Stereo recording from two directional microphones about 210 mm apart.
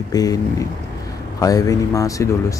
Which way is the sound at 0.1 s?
15° left (ahead or behind).